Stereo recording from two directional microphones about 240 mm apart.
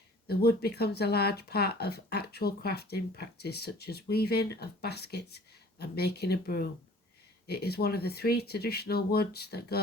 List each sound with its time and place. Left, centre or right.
0.3 s speech: left